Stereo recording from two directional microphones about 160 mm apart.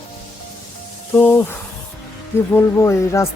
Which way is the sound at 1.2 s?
10° left (ahead or behind).